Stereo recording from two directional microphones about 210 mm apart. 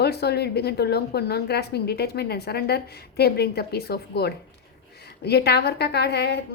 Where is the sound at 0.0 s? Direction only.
50° left (ahead or behind).